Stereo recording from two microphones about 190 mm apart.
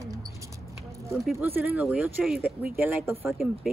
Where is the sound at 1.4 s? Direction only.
10° right (ahead or behind).